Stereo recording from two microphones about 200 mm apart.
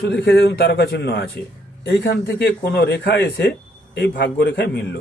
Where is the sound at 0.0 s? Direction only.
60° left (ahead or behind).